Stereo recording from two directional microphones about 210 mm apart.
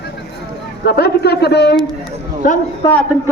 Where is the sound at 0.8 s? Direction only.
50° left (ahead or behind).